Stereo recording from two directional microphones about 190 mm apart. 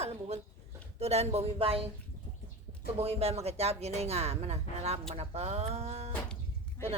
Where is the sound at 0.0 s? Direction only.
35° right (ahead or behind).